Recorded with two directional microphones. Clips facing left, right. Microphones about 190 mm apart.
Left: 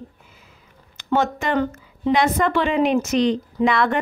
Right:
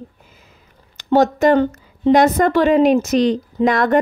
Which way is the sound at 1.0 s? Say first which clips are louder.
Right 8 dB; 40° right (ahead or behind).